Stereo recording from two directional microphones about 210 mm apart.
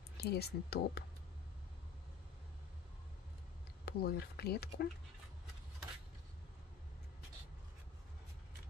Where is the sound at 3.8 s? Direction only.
50° left (ahead or behind).